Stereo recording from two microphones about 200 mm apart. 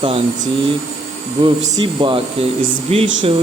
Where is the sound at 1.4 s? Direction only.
25° right (ahead or behind).